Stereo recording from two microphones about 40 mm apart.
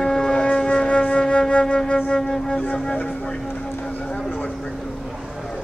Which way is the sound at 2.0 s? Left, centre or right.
Centre.